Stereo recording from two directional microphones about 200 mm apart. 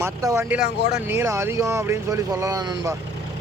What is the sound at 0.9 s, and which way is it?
Speech, 10° right (ahead or behind).